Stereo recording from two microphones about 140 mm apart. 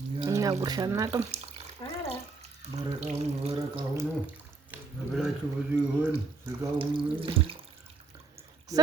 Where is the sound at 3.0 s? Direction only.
50° right (ahead or behind).